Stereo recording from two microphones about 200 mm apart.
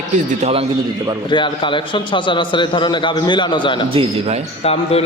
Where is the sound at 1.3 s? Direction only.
25° left (ahead or behind).